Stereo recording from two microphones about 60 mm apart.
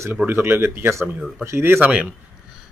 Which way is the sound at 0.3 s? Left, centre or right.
Right.